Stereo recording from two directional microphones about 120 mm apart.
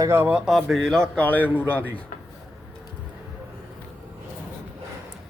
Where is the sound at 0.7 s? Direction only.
5° left (ahead or behind).